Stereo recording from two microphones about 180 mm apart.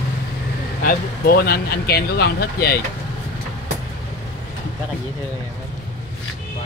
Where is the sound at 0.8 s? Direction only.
55° left (ahead or behind).